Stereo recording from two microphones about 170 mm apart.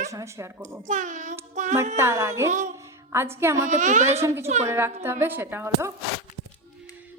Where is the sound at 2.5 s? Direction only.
45° right (ahead or behind).